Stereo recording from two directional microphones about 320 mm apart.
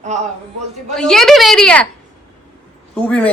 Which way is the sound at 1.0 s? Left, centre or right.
Centre.